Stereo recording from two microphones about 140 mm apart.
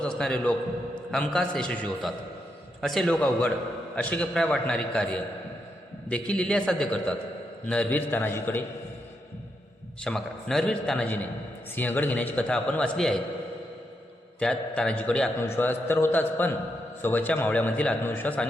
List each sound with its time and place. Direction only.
0.0 s a man's voice: 5° left (ahead or behind)
10.0 s a man's voice: 5° left (ahead or behind)
14.3 s speech: 5° left (ahead or behind)